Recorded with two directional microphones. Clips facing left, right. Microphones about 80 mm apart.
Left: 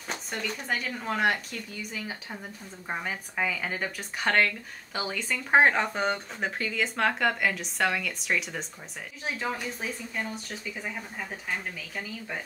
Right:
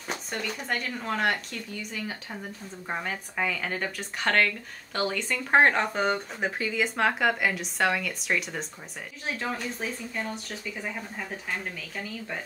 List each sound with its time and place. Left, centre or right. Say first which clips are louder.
0.1 s speech: right 1 dB; centre